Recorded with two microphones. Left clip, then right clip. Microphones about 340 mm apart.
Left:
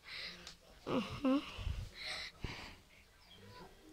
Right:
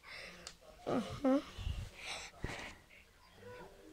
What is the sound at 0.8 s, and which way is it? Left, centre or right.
Wheeze, centre.